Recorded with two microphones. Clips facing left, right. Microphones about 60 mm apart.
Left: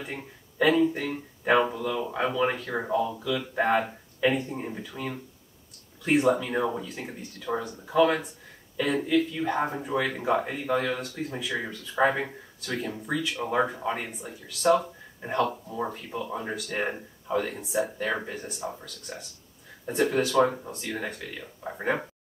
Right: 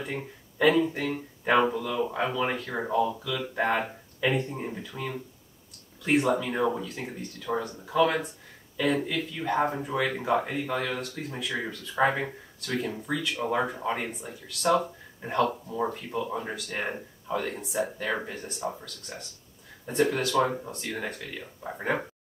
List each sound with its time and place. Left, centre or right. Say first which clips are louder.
0.0 s speech: right 3 dB; centre
6.0 s speech: left 2 dB; centre